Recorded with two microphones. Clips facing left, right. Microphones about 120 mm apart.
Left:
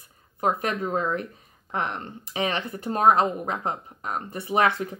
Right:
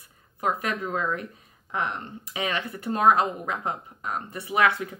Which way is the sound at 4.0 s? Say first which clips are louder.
Left 1 dB; 45° left (ahead or behind).